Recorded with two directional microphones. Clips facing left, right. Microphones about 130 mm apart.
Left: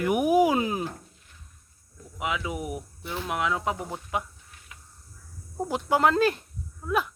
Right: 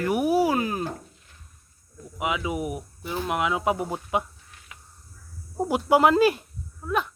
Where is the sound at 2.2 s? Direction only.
5° right (ahead or behind).